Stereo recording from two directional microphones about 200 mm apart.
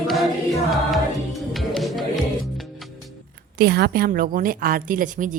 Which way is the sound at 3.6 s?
50° right (ahead or behind).